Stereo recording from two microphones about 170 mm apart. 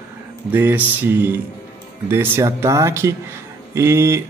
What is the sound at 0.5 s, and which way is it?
A man's voice, 10° right (ahead or behind).